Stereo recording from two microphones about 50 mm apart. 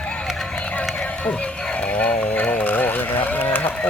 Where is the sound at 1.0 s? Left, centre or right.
Centre.